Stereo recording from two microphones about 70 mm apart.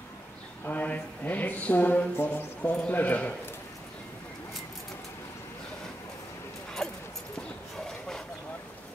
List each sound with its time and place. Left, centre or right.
0.7 s speech: left
6.8 s clip-clop: centre